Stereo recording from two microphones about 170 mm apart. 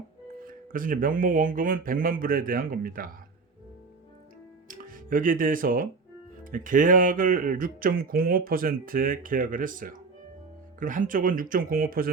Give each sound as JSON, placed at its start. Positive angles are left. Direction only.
{"t": 0.3, "sound": "speech", "side_deg": -55}
{"t": 4.7, "sound": "speech", "side_deg": -55}